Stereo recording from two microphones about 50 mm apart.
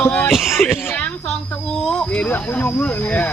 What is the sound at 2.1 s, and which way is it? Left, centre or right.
Speech, left.